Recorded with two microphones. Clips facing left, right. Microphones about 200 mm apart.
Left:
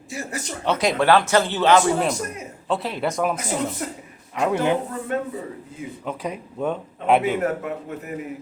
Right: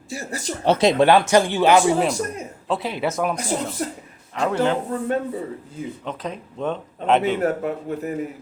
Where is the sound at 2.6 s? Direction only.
Centre (ahead or behind).